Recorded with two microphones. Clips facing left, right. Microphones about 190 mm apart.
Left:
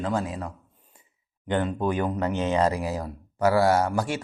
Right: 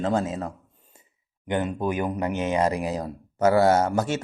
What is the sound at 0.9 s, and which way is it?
Sigh, 25° right (ahead or behind).